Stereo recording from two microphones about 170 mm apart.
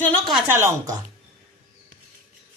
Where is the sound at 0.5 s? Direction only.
15° right (ahead or behind).